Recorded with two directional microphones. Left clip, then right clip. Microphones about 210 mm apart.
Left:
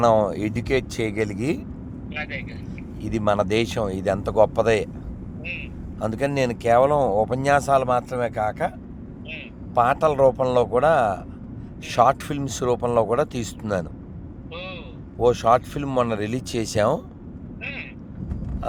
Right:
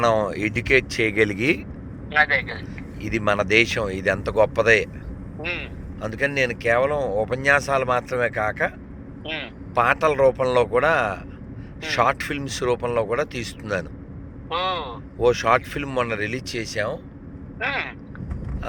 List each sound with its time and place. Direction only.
0.0 s speech: 15° left (ahead or behind)
1.1 s a man's voice: centre (ahead or behind)
2.1 s speech: 55° right (ahead or behind)
3.0 s speech: 15° left (ahead or behind)
5.4 s vehicle: 50° right (ahead or behind)
6.1 s speech: 20° left (ahead or behind)
9.2 s a man's voice: 55° right (ahead or behind)
9.7 s speech: 15° left (ahead or behind)
14.5 s vehicle: 50° right (ahead or behind)
15.2 s speech: 15° left (ahead or behind); by 17.0 s 30° left (ahead or behind)
17.6 s vehicle: 50° right (ahead or behind)